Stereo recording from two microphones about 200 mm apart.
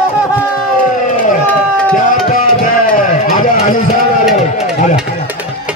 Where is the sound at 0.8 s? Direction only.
40° left (ahead or behind).